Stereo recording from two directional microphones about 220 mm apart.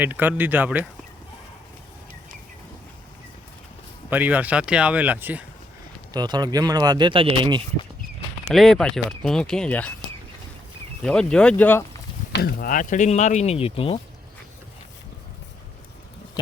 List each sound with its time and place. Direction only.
0.0 s speech: 10° right (ahead or behind)
4.1 s speech: 10° right (ahead or behind)
6.1 s speech: 20° right (ahead or behind)
8.4 s speech: centre (ahead or behind)
11.0 s speech: 5° left (ahead or behind)
12.3 s speech: 45° left (ahead or behind); by 14.0 s 25° left (ahead or behind)